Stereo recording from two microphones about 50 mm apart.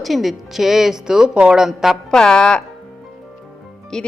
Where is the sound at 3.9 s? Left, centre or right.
Centre.